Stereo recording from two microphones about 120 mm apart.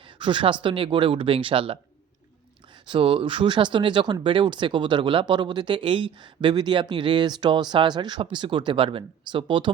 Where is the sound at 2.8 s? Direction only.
45° right (ahead or behind).